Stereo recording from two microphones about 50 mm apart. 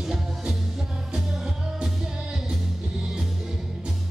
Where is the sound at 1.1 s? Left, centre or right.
Centre.